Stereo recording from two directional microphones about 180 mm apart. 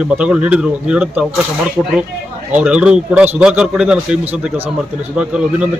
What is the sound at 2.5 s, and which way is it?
A man's voice, 5° right (ahead or behind).